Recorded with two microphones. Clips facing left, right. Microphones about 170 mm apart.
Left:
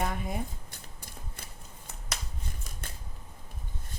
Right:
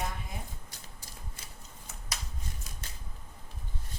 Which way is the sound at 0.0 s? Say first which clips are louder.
Left 6 dB; 55° left (ahead or behind).